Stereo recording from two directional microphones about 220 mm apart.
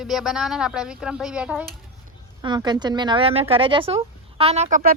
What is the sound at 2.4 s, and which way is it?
Speech, 20° right (ahead or behind).